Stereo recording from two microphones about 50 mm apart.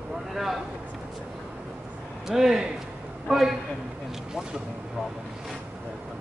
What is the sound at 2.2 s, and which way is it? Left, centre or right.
A woman's voice, centre.